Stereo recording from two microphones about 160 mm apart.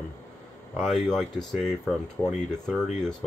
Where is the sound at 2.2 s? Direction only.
20° left (ahead or behind).